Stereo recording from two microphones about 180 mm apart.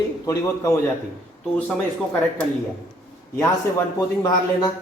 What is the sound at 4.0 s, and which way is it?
Speech, 20° left (ahead or behind).